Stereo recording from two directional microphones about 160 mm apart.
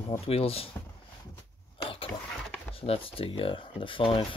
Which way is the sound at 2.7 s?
35° left (ahead or behind).